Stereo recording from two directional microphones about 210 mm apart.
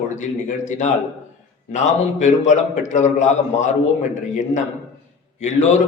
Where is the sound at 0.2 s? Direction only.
35° left (ahead or behind).